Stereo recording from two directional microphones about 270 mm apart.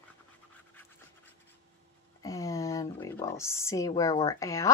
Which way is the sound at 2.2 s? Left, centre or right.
Centre.